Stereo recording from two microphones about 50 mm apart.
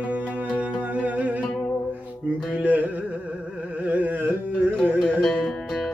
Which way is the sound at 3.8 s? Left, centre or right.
Right.